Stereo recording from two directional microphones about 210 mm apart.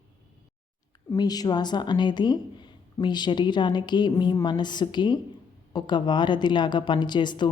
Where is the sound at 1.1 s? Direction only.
20° left (ahead or behind).